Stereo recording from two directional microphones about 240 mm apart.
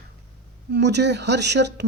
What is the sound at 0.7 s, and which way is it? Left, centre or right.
A woman's voice, right.